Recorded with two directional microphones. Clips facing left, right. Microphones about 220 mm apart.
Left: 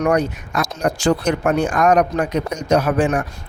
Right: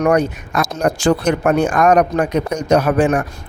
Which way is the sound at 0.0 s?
55° right (ahead or behind).